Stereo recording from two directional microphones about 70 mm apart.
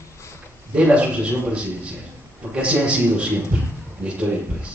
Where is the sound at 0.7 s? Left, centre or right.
Centre.